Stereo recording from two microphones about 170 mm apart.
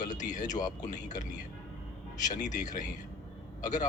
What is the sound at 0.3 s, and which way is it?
Speech, 45° left (ahead or behind).